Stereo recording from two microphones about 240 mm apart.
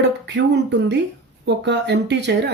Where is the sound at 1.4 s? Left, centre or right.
Right.